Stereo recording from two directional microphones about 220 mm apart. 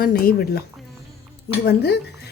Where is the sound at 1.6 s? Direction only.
45° left (ahead or behind).